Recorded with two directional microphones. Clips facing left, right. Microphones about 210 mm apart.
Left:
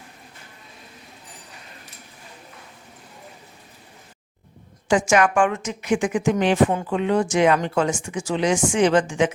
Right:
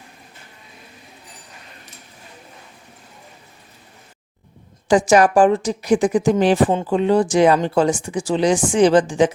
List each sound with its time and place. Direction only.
4.9 s speech: 35° right (ahead or behind)